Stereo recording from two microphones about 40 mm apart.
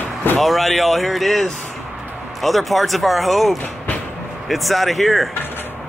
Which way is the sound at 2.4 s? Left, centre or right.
Centre.